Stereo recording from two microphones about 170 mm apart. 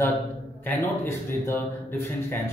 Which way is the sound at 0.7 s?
15° left (ahead or behind).